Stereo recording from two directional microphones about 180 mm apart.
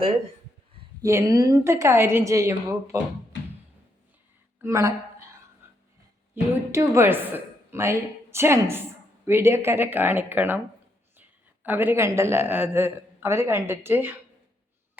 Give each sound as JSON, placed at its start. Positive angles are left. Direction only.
{"t": 1.0, "sound": "a woman's voice", "side_deg": -20}
{"t": 4.6, "sound": "a sound", "side_deg": -15}
{"t": 6.3, "sound": "a woman's voice", "side_deg": -15}